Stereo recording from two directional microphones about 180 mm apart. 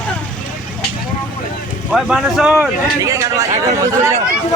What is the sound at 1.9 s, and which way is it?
Speech, 5° right (ahead or behind).